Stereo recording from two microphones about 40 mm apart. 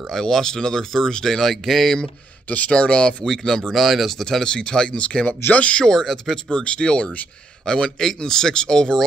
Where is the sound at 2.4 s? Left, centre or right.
Left.